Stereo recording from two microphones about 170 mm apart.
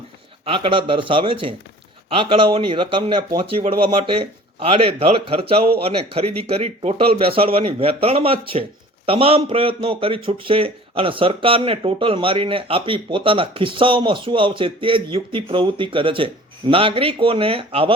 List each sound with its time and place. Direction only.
0.4 s a man's voice: 30° right (ahead or behind)